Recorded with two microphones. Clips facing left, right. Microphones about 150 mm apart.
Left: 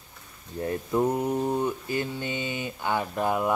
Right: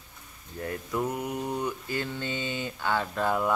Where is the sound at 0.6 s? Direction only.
30° left (ahead or behind).